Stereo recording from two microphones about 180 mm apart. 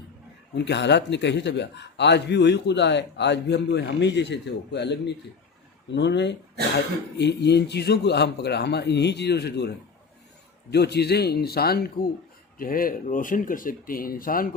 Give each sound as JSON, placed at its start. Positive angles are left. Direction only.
{"t": 0.5, "sound": "a man's voice", "side_deg": 70}